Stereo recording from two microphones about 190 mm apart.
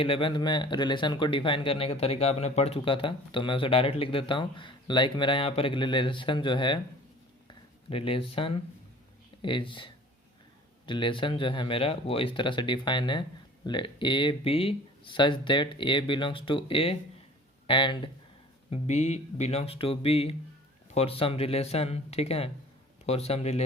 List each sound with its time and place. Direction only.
0.0 s speech: 30° left (ahead or behind)
7.4 s a sound: 30° left (ahead or behind)
9.4 s speech: 25° left (ahead or behind)
18.7 s speech: 35° left (ahead or behind)